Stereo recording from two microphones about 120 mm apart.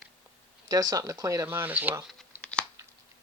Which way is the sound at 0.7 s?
30° right (ahead or behind).